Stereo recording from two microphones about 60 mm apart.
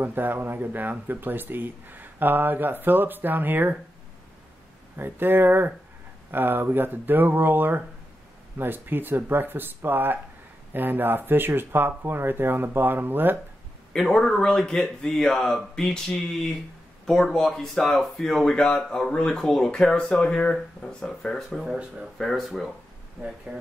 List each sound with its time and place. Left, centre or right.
0.0 s speech: right
4.9 s speech: right
13.9 s speech: centre
21.6 s speech: centre
22.2 s speech: centre